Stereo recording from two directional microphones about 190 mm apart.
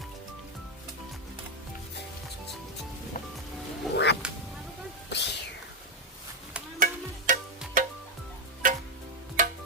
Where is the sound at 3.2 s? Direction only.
45° left (ahead or behind).